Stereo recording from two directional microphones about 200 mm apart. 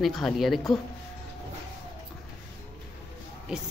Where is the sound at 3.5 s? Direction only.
5° right (ahead or behind).